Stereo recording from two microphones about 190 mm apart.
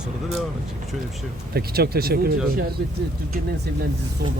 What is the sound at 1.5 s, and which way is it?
Speech, 55° right (ahead or behind).